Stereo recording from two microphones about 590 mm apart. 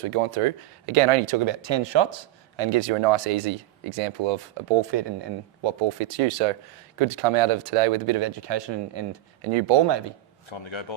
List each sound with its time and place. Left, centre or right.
0.0 s speech: right
2.6 s speech: right
9.8 s speech: right
10.5 s a man's voice: left